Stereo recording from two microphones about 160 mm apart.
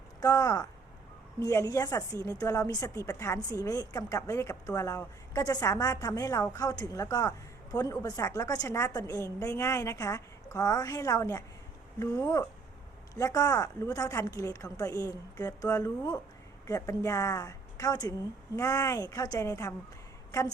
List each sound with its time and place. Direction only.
0.2 s a woman's voice: 20° left (ahead or behind)